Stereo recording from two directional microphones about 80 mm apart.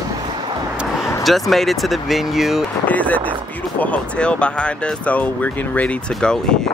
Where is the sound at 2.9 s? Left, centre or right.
Centre.